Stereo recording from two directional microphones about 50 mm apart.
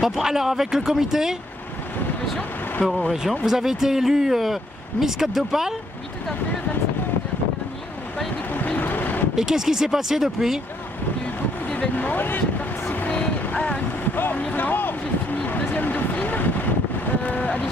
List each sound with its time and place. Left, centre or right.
0.0 s speech: centre
3.1 s speech: centre
8.5 s vehicle: left
9.3 s speech: centre
11.7 s vehicle: left
13.1 s vehicle: left
14.1 s speech: left
15.3 s vehicle: left